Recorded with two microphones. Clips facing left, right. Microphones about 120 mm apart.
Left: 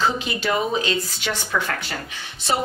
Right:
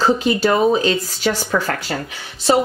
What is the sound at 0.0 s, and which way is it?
Speech, 40° right (ahead or behind).